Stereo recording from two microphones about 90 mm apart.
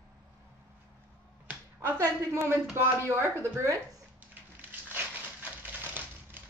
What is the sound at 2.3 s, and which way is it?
A woman's voice, 30° right (ahead or behind).